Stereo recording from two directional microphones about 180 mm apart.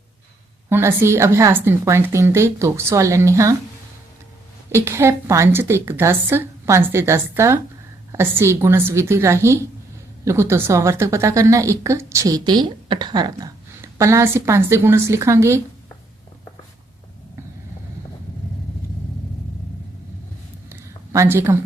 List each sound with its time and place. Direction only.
0.7 s a woman's voice: 15° right (ahead or behind)
4.7 s a woman's voice: 15° right (ahead or behind)
20.7 s a sound: 15° right (ahead or behind)